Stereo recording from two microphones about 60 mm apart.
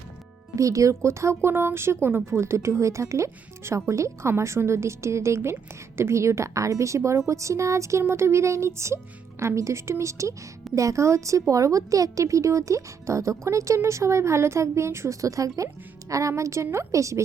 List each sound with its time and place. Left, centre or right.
0.5 s speech: right
3.2 s a woman's voice: right